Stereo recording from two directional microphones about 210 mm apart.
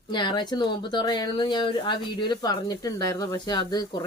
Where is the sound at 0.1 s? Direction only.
20° left (ahead or behind).